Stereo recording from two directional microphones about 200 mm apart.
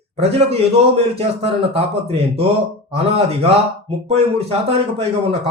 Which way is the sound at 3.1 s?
30° right (ahead or behind).